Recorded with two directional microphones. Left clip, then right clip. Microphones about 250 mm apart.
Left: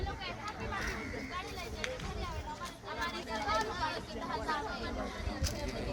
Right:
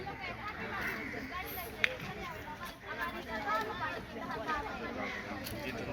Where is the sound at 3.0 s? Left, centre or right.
Left.